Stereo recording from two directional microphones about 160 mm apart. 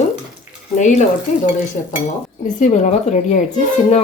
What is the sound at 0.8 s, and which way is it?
Speech, 50° left (ahead or behind).